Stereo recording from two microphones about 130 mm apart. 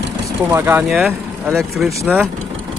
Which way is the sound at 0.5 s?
20° right (ahead or behind).